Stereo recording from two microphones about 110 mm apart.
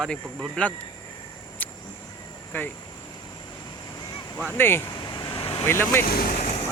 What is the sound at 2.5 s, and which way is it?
Speech, 20° left (ahead or behind).